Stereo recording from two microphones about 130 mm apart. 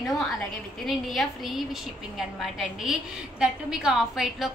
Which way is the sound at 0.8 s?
Centre (ahead or behind).